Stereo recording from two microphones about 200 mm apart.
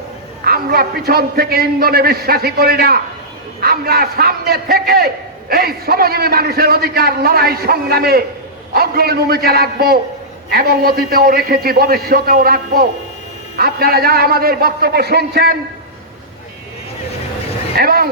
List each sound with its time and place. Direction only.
0.4 s a man's voice: 50° right (ahead or behind)
17.7 s a man's voice: 50° right (ahead or behind)